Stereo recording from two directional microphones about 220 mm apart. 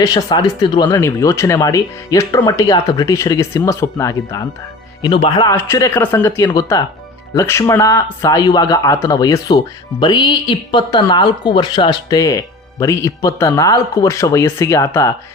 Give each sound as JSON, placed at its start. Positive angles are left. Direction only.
{"t": 0.0, "sound": "speech", "side_deg": 15}